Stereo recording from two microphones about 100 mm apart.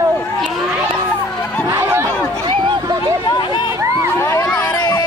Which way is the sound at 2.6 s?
50° right (ahead or behind).